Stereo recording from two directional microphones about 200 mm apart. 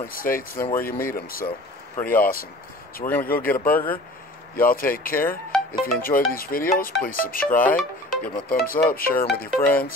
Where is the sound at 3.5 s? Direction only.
45° left (ahead or behind).